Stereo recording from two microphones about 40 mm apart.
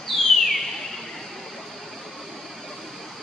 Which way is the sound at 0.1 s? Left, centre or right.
Centre.